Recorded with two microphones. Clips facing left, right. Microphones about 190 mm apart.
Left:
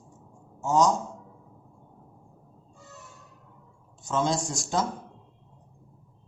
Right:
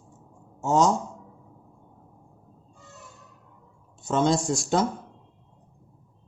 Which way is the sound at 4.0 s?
65° right (ahead or behind).